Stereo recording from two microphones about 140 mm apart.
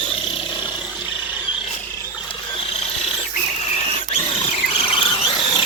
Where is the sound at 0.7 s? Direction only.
5° right (ahead or behind).